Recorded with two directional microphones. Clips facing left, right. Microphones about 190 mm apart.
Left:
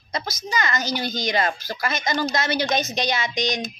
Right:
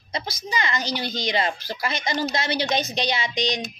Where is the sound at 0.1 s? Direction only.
30° right (ahead or behind).